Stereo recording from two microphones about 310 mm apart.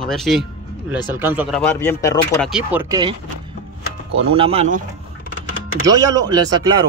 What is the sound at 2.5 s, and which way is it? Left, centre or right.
Speech, centre.